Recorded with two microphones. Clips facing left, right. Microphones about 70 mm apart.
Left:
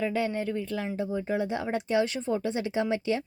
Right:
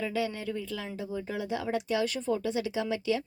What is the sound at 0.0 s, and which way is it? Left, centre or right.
A woman's voice, left.